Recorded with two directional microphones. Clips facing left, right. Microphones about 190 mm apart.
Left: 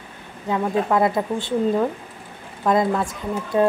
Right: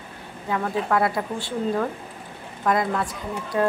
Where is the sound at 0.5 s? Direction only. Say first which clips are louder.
Left 3 dB; 20° left (ahead or behind).